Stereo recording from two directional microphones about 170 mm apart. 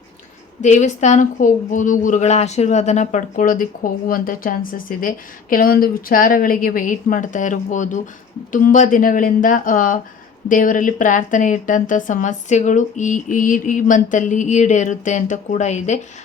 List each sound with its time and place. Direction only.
0.6 s a woman's voice: 45° left (ahead or behind)